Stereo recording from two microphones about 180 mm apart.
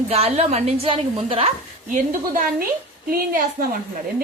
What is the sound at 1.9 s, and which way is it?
A woman's voice, 50° right (ahead or behind).